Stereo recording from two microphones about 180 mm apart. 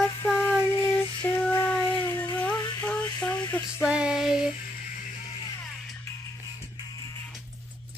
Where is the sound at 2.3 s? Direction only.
10° left (ahead or behind).